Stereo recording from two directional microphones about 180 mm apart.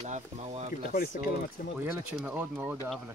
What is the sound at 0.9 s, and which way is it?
Speech, 50° left (ahead or behind).